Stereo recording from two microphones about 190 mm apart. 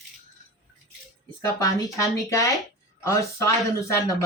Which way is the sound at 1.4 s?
20° left (ahead or behind).